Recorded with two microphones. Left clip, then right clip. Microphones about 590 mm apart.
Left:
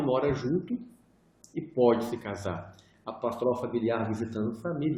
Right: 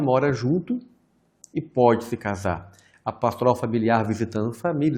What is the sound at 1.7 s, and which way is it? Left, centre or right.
Speech, right.